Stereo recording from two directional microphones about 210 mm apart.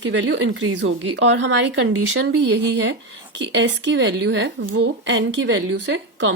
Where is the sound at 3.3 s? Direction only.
60° right (ahead or behind).